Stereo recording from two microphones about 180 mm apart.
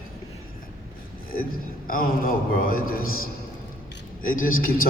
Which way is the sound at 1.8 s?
50° left (ahead or behind).